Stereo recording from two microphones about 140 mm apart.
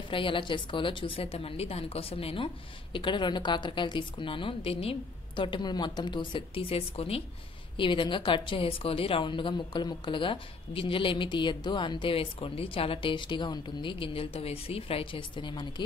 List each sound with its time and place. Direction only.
0.1 s a woman's voice: 35° left (ahead or behind)